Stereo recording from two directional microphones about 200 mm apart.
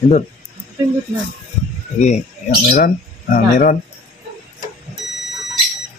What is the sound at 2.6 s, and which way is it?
Speech, 40° left (ahead or behind).